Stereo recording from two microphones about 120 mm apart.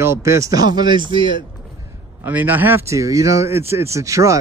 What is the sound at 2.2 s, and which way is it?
A man's voice, 15° right (ahead or behind).